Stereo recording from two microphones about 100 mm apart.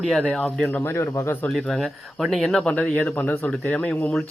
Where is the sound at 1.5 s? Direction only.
5° left (ahead or behind).